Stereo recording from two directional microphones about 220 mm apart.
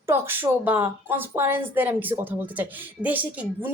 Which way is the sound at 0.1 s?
10° right (ahead or behind).